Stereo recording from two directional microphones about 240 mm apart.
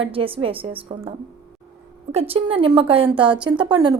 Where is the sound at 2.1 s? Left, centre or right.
Right.